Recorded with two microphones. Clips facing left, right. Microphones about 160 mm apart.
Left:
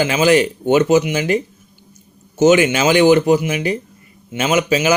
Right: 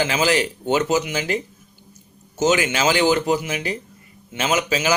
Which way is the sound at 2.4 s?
20° left (ahead or behind).